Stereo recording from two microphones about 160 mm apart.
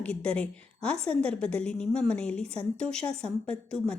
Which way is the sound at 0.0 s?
10° left (ahead or behind).